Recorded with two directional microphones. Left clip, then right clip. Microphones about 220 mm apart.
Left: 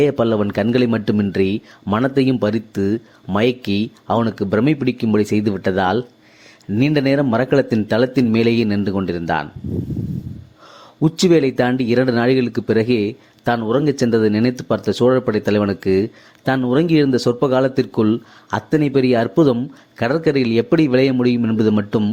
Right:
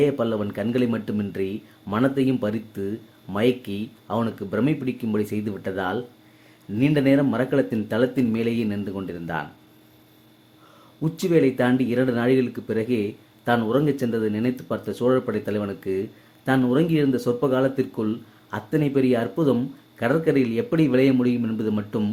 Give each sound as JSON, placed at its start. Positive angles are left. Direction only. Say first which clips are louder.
{"t": 0.0, "sound": "speech", "louder": "left 6 dB", "side_deg": 35}
{"t": 11.0, "sound": "speech", "louder": "left 6 dB", "side_deg": 35}